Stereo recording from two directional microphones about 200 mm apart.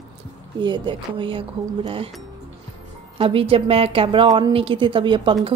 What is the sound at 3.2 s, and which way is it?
A woman's voice, 25° right (ahead or behind).